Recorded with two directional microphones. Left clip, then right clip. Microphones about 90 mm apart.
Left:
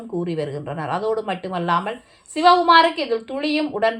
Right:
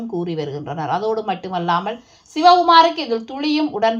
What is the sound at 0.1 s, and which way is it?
A woman's voice, 30° right (ahead or behind).